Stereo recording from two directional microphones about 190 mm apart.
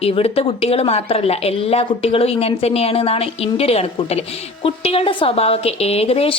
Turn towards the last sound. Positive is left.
turn(degrees=30)  # may be behind; listen again after turning